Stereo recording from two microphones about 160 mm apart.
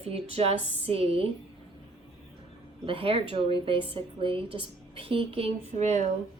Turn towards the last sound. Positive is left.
turn(degrees=-45)  # may be behind; listen again after turning